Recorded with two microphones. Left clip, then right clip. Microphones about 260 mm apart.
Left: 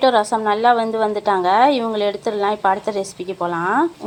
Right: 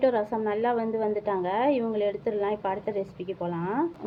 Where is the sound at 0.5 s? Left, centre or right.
Centre.